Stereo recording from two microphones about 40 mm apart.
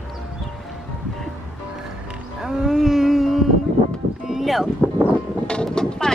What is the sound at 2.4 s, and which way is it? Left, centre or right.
Wail, centre.